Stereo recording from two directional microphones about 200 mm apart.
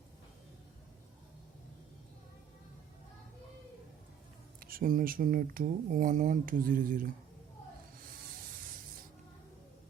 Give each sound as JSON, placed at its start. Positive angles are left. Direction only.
{"t": 4.6, "sound": "speech", "side_deg": -45}